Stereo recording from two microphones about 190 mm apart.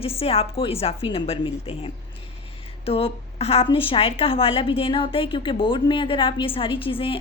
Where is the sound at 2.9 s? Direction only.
30° left (ahead or behind).